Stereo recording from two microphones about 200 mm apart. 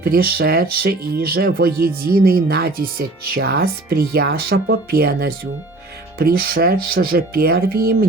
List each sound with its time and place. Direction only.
0.0 s speech: 50° right (ahead or behind)